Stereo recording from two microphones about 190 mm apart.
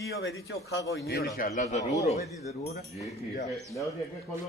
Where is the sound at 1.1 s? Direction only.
55° left (ahead or behind); by 1.8 s 40° left (ahead or behind).